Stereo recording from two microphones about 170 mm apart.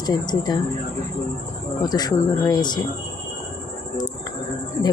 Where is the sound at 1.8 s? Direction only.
25° left (ahead or behind).